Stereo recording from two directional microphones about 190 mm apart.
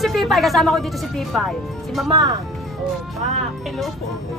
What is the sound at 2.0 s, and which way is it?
Speech, 20° right (ahead or behind).